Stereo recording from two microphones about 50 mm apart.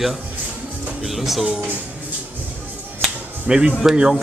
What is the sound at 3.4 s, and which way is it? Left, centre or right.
Speech, centre.